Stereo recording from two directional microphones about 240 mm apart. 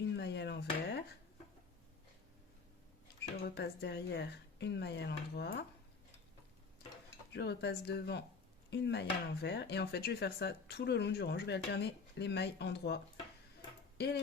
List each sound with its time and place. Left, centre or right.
0.2 s dishes: left
3.5 s speech: left
7.3 s speech: left